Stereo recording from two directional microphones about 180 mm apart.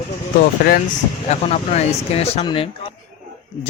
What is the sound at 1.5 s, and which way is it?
A man's voice, 35° left (ahead or behind).